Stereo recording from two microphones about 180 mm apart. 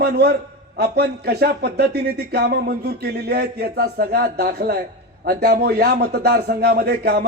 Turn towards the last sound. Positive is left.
turn(degrees=-60)  # may be behind; listen again after turning